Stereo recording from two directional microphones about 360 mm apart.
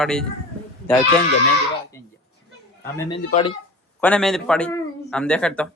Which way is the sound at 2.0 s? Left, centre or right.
Centre.